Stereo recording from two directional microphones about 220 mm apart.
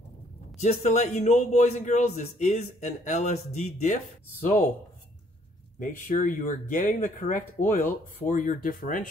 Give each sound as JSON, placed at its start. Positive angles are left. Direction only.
{"t": 0.6, "sound": "a man's voice", "side_deg": 30}
{"t": 5.8, "sound": "a man's voice", "side_deg": 35}